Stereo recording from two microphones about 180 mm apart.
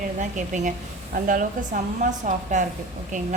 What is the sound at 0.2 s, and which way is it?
A woman's voice, 45° right (ahead or behind).